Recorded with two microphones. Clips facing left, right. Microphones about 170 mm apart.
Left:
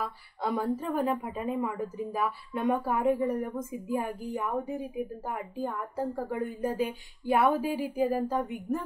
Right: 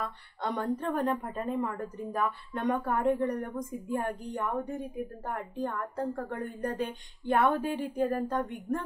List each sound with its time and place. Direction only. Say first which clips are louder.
0.0 s a woman's voice: left 2 dB; 5° left (ahead or behind)